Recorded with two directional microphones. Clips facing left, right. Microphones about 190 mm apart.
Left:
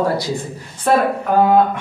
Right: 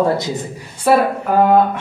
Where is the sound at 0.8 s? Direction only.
10° right (ahead or behind).